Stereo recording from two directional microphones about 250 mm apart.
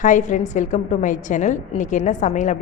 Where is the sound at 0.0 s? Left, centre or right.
Left.